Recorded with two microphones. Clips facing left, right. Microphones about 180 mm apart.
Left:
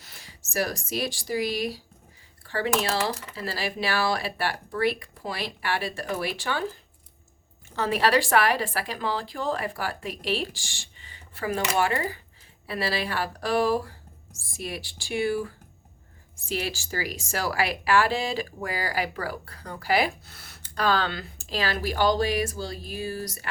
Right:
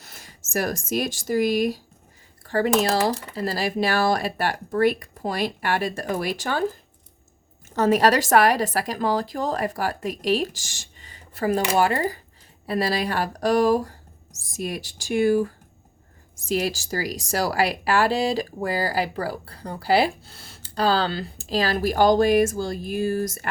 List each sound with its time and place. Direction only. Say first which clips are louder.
0.0 s speech: right 3 dB; 45° right (ahead or behind)
7.8 s speech: right 5 dB; 45° right (ahead or behind)